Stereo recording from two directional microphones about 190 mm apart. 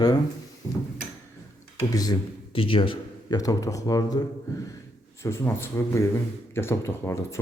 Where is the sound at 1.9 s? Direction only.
20° left (ahead or behind).